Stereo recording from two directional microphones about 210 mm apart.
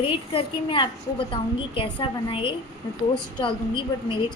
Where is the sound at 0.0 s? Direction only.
25° left (ahead or behind).